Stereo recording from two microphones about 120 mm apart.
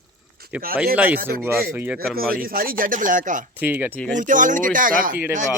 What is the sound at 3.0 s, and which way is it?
Speech, 90° right.